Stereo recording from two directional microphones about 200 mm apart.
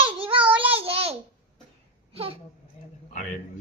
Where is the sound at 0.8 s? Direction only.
30° right (ahead or behind).